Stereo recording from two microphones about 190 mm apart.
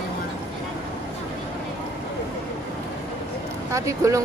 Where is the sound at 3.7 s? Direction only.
15° right (ahead or behind).